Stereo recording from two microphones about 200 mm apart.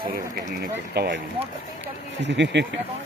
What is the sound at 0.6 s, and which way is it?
Speech, 55° right (ahead or behind).